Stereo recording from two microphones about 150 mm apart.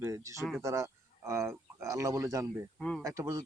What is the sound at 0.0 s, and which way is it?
Speech, 20° right (ahead or behind).